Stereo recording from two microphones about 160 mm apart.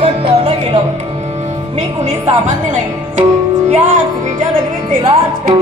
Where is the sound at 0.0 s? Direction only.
35° right (ahead or behind).